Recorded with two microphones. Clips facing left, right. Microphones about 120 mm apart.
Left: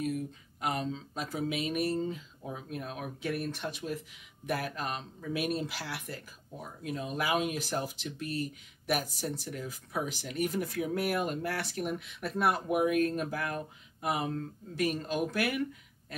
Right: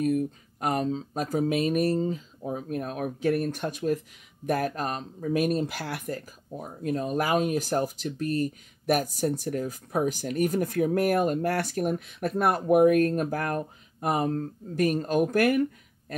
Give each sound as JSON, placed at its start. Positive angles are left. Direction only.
{"t": 0.0, "sound": "speech", "side_deg": -45}